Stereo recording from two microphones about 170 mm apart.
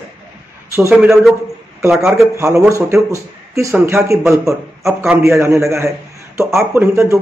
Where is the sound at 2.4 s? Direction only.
15° right (ahead or behind).